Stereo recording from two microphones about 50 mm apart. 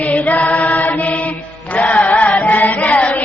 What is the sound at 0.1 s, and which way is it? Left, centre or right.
Chant, left.